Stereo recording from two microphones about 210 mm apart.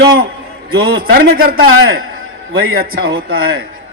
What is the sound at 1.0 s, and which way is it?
Speech, 45° right (ahead or behind).